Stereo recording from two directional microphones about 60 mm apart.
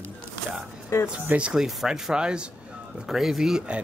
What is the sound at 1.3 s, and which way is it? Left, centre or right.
Speech, centre.